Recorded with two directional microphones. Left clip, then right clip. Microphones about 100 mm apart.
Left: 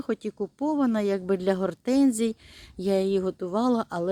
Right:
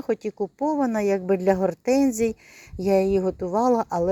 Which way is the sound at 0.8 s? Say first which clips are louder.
Right 2 dB; 10° left (ahead or behind).